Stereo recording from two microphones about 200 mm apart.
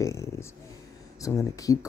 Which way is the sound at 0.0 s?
15° left (ahead or behind).